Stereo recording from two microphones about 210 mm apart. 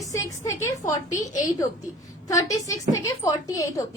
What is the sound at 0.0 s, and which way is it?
A woman's voice, 15° left (ahead or behind).